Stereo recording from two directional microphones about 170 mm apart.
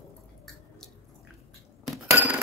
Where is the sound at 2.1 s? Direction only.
10° right (ahead or behind).